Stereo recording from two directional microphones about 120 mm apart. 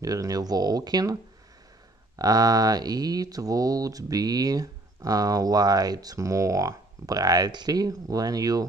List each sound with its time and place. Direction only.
0.0 s speech: 30° right (ahead or behind)
2.1 s speech: 30° right (ahead or behind)